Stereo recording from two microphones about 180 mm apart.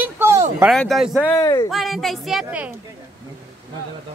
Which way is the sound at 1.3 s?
20° left (ahead or behind).